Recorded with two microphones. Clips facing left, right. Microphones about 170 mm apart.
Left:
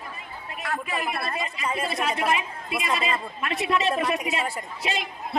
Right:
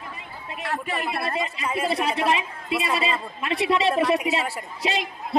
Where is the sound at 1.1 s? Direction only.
30° right (ahead or behind).